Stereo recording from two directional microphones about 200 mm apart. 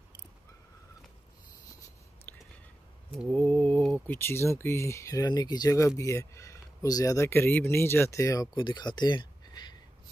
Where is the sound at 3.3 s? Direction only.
5° left (ahead or behind).